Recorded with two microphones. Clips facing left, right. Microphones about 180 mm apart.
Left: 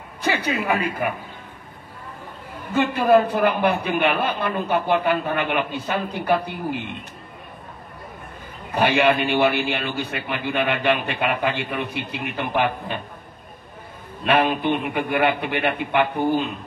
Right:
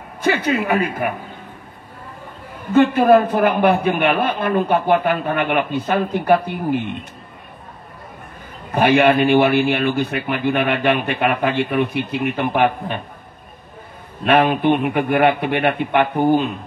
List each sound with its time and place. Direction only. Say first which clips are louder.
0.2 s a man's voice: right 5 dB; 50° right (ahead or behind)
2.7 s speech: right 5 dB; 55° right (ahead or behind)
8.8 s speech: right 5 dB; 55° right (ahead or behind)
14.2 s speech: right 5 dB; 55° right (ahead or behind)